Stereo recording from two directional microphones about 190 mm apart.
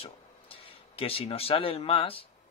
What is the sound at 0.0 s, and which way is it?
Speech, 30° left (ahead or behind).